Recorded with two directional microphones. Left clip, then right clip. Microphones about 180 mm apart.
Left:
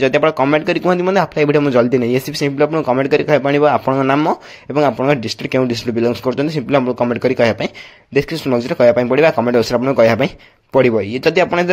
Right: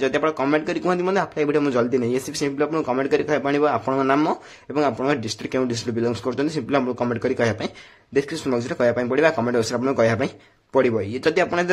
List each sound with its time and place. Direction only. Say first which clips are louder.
0.0 s a man's voice: left 8 dB; 30° left (ahead or behind)